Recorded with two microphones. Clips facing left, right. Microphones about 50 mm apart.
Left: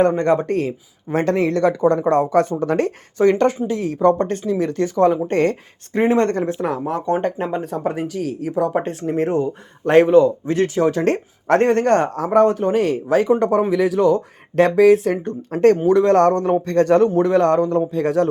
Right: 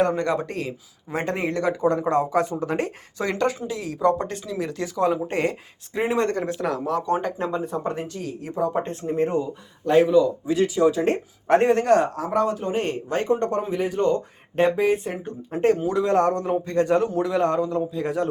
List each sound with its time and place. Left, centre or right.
0.2 s a man's voice: left
1.1 s speech: left
3.2 s a man's voice: left
6.4 s speech: left
7.5 s speech: left
17.2 s speech: left